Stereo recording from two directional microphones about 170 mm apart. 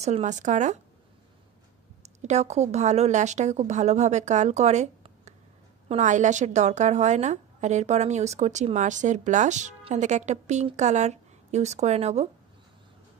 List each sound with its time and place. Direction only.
0.0 s a woman's voice: 40° right (ahead or behind)
2.2 s a woman's voice: 40° right (ahead or behind)